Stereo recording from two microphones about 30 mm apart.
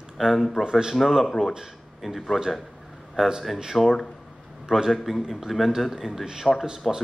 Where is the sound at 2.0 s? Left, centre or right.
Centre.